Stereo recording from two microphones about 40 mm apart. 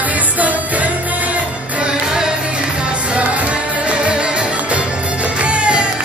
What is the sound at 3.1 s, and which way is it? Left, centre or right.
Music, right.